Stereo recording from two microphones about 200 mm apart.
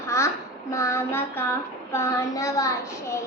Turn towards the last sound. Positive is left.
turn(degrees=15)  # may be behind; listen again after turning